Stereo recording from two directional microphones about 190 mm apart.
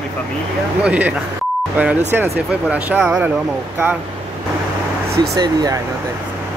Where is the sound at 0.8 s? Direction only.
5° right (ahead or behind).